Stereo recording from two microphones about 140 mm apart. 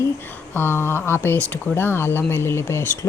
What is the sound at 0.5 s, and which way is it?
Speech, 15° left (ahead or behind).